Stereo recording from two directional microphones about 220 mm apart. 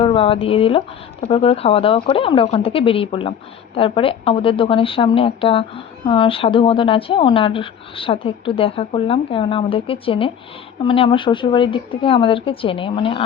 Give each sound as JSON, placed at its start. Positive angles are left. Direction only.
{"t": 0.0, "sound": "a woman's voice", "side_deg": 25}